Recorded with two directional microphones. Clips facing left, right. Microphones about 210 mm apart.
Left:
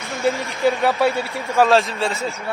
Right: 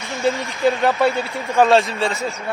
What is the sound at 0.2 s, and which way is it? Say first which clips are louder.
Speech: even; centre (ahead or behind).